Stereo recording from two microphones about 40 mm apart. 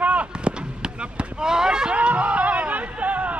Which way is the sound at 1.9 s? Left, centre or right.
Right.